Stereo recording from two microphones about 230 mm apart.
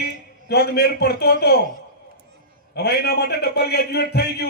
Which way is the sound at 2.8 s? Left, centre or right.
Left.